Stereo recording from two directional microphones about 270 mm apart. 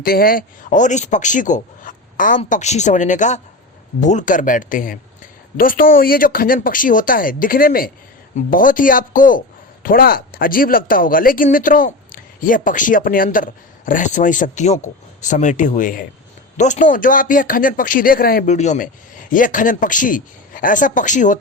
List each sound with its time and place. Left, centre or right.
0.0 s a man's voice: left